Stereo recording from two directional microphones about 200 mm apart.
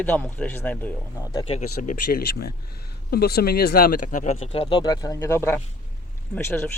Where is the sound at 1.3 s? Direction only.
30° left (ahead or behind); by 6.7 s 10° left (ahead or behind).